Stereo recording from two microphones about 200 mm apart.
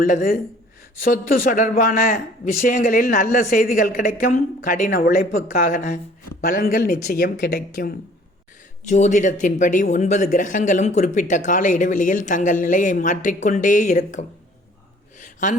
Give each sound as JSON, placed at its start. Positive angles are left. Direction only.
{"t": 0.0, "sound": "speech", "side_deg": 45}
{"t": 8.9, "sound": "speech", "side_deg": 35}
{"t": 15.2, "sound": "a sound", "side_deg": 40}